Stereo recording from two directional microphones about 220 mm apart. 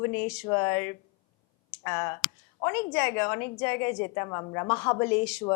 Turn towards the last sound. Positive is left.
turn(degrees=5)  # may be behind; listen again after turning